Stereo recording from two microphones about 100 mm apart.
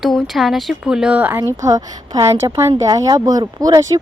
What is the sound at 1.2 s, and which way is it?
Speech, 20° right (ahead or behind).